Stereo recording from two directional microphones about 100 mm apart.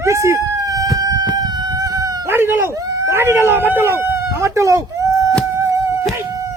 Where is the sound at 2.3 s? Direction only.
20° right (ahead or behind).